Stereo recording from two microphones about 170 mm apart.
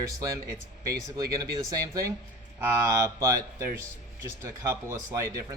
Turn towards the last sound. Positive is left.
turn(degrees=-15)  # may be behind; listen again after turning